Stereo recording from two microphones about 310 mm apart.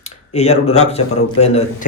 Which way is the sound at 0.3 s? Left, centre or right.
Centre.